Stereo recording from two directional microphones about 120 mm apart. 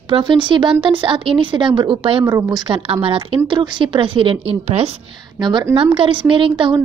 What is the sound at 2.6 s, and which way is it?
Speech, 50° right (ahead or behind).